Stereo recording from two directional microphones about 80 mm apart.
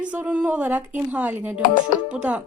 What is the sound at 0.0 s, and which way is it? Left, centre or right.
A woman's voice, centre.